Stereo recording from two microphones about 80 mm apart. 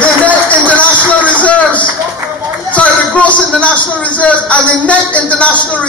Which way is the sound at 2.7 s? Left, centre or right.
Centre.